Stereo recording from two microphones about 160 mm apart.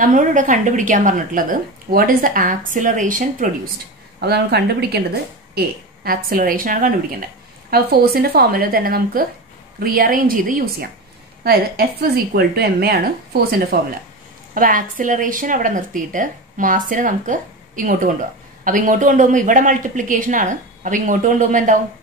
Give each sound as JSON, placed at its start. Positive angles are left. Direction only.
{"t": 0.0, "sound": "a woman's voice", "side_deg": -55}
{"t": 4.2, "sound": "a woman's voice", "side_deg": -90}
{"t": 6.0, "sound": "a woman's voice", "side_deg": -65}
{"t": 7.7, "sound": "a woman's voice", "side_deg": -75}
{"t": 14.5, "sound": "a woman's voice", "side_deg": -60}